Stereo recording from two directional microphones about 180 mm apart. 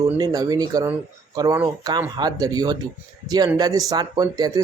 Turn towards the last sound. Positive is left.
turn(degrees=-20)  # may be behind; listen again after turning